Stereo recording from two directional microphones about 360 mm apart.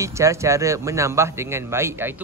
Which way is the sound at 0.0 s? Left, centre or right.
Centre.